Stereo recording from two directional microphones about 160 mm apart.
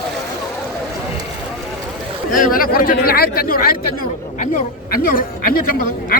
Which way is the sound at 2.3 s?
60° left (ahead or behind).